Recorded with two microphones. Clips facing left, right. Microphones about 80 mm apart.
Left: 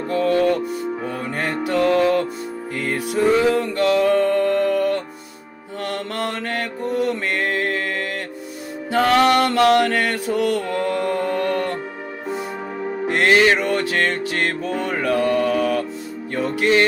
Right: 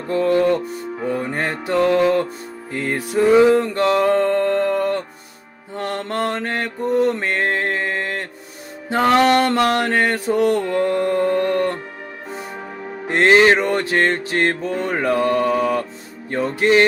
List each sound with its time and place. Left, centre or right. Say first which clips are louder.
0.1 s music: right 2 dB; right
1.0 s mantra: right 3 dB; right
2.7 s mantra: right 2 dB; right
3.9 s music: even; right
5.8 s mantra: right 3 dB; right
13.1 s mantra: right 3 dB; right